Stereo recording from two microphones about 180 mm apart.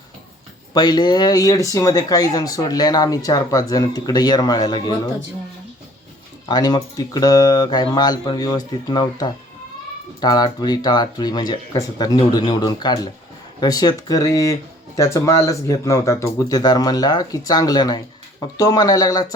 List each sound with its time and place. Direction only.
0.7 s speech: 25° left (ahead or behind)
6.5 s speech: 20° left (ahead or behind)